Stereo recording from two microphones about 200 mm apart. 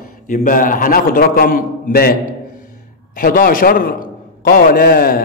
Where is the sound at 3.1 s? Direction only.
45° left (ahead or behind).